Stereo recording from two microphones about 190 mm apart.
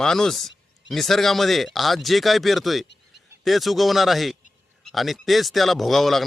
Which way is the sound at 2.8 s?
65° left (ahead or behind).